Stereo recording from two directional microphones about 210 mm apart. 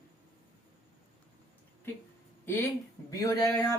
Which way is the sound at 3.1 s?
15° left (ahead or behind).